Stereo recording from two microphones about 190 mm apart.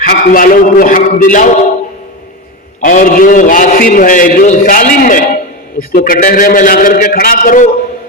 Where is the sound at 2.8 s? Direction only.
45° left (ahead or behind).